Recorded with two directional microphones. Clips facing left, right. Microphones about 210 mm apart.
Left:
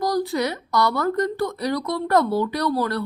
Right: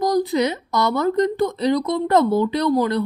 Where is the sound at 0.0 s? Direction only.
20° right (ahead or behind).